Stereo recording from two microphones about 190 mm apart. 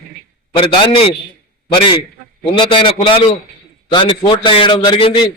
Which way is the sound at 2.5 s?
25° left (ahead or behind).